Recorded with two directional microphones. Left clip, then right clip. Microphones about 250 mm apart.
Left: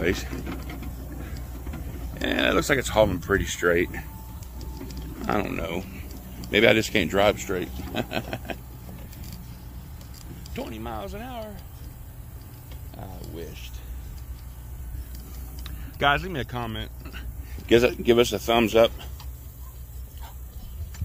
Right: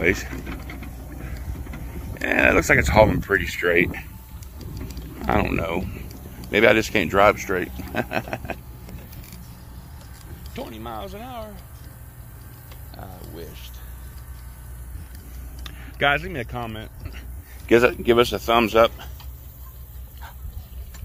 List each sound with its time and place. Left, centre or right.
0.3 s a sound: centre
2.2 s speech: centre
4.7 s a sound: centre
6.5 s speech: centre
10.5 s speech: centre
16.0 s speech: centre
17.6 s speech: centre